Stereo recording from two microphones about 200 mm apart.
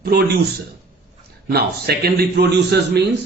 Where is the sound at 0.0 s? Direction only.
50° right (ahead or behind).